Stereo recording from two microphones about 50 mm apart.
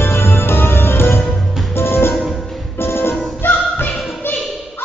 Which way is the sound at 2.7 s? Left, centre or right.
Left.